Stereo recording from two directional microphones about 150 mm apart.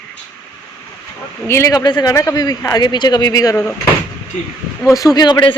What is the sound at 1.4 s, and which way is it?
Speech, 20° left (ahead or behind).